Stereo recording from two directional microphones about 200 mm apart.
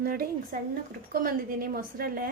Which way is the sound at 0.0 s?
50° right (ahead or behind).